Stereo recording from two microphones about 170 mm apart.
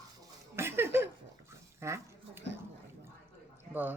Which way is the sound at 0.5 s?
15° right (ahead or behind).